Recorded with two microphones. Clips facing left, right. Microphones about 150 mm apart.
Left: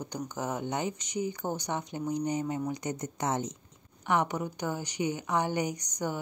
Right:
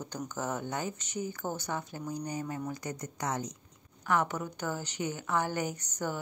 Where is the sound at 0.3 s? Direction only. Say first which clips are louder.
Left 2 dB; 15° left (ahead or behind).